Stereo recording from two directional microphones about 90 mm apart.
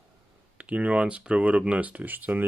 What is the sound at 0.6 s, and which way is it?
Speech, 15° right (ahead or behind).